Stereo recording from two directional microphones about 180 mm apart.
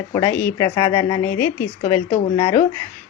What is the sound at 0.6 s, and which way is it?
Speech, 20° left (ahead or behind).